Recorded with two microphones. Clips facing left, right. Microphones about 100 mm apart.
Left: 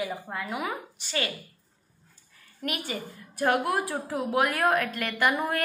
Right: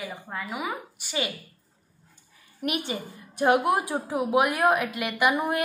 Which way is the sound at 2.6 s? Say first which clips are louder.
Right 3 dB; 20° right (ahead or behind).